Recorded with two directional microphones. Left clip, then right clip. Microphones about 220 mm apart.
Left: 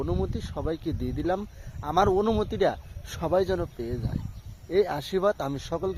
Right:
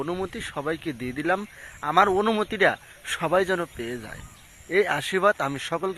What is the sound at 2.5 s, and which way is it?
Speech, centre (ahead or behind).